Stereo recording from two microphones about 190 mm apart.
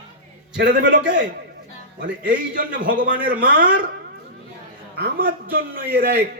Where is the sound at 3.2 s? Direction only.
45° right (ahead or behind).